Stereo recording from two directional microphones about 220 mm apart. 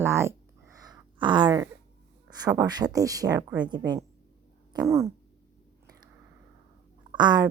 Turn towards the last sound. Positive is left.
turn(degrees=-20)  # may be behind; listen again after turning